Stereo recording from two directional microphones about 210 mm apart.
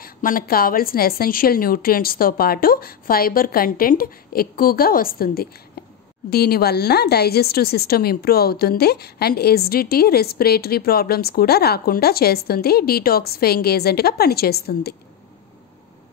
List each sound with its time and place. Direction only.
0.0 s a woman's voice: 40° left (ahead or behind)
5.8 s a sound: 45° left (ahead or behind)
6.3 s a woman's voice: 50° left (ahead or behind)